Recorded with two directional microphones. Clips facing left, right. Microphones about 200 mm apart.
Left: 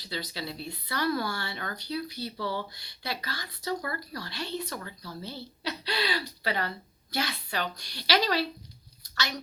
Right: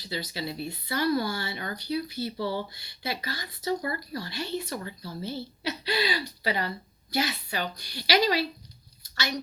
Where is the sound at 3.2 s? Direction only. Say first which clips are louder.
Right 4 dB; 10° right (ahead or behind).